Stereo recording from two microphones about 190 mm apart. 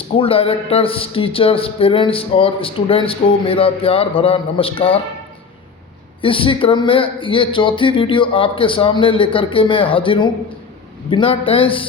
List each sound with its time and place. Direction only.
0.2 s speech: 30° left (ahead or behind)
6.2 s speech: 25° left (ahead or behind)